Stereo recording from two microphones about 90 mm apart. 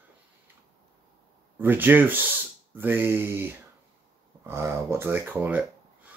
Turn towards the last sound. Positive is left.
turn(degrees=-20)  # may be behind; listen again after turning